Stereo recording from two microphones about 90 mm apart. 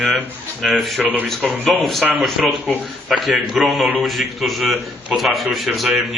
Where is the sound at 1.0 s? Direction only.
20° right (ahead or behind).